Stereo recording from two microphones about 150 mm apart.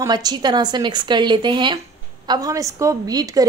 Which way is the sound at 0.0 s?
25° right (ahead or behind).